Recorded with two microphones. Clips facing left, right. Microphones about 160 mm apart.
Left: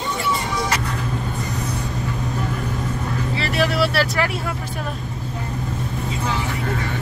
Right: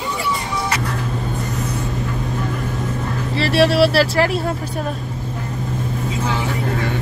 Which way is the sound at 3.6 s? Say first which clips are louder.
Right 6 dB; 30° right (ahead or behind).